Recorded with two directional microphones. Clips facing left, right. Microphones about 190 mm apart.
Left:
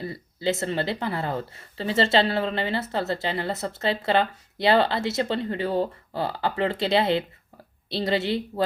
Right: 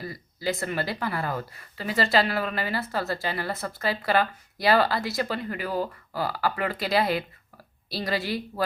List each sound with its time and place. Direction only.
0.0 s speech: 25° left (ahead or behind)